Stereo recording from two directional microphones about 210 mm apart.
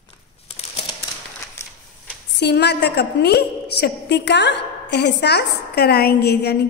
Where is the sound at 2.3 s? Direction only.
50° left (ahead or behind).